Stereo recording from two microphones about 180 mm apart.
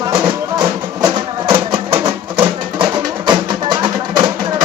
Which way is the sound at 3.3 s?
25° right (ahead or behind).